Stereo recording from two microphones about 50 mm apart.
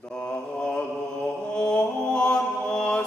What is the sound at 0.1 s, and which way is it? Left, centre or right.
Mantra, centre.